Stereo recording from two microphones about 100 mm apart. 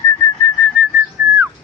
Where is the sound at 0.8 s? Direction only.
10° right (ahead or behind).